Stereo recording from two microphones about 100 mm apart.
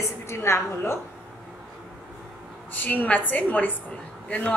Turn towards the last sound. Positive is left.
turn(degrees=15)  # may be behind; listen again after turning